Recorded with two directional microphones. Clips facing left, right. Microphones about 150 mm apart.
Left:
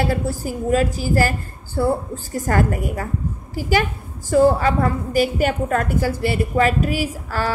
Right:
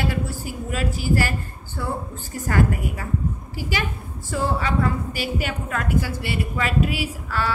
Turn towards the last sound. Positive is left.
turn(degrees=40)  # may be behind; listen again after turning